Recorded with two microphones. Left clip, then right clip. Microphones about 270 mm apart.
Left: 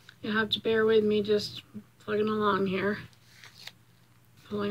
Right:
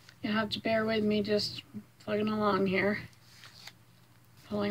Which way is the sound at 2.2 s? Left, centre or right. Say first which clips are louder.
Left 3 dB; centre.